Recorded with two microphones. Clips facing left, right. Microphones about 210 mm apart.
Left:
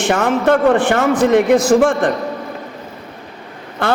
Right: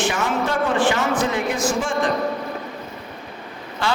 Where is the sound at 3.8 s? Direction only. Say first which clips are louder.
Left 6 dB; 55° left (ahead or behind).